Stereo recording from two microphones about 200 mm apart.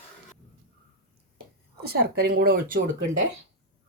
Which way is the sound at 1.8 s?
55° right (ahead or behind).